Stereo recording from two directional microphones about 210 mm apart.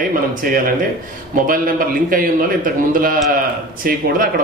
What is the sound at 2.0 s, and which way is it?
A man's voice, 40° right (ahead or behind).